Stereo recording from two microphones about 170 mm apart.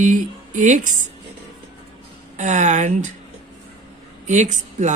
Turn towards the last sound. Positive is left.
turn(degrees=-45)  # may be behind; listen again after turning